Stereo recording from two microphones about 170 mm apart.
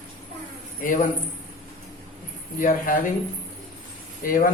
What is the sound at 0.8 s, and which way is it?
Speech, 50° left (ahead or behind).